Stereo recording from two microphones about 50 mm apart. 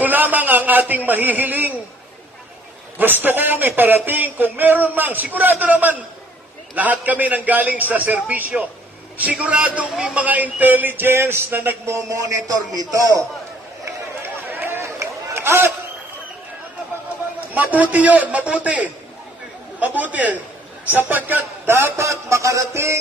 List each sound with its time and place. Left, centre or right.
0.0 s a man's voice: right
3.0 s a man's voice: right
11.8 s a sound: right
14.2 s run: right
14.8 s run: right
17.6 s a man's voice: right
21.6 s music: right